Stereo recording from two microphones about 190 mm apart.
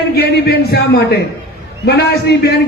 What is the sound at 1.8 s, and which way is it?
Speech, 60° left (ahead or behind).